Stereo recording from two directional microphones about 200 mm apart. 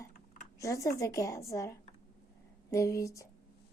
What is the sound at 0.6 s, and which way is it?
A woman's voice, 15° left (ahead or behind).